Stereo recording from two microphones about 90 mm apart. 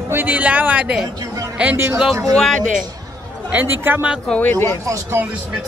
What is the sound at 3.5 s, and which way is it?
Speech, 20° right (ahead or behind).